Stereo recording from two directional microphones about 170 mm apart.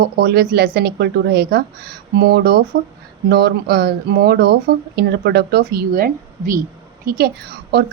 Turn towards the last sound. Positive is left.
turn(degrees=-70)  # may be behind; listen again after turning